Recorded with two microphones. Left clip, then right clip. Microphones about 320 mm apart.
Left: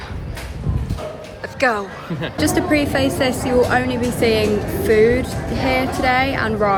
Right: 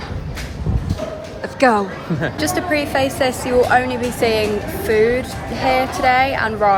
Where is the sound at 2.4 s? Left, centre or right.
Centre.